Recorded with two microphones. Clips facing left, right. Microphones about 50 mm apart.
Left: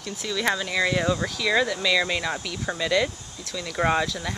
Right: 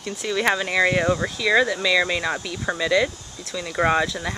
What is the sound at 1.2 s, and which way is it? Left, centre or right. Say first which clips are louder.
Speech: right 4 dB; right.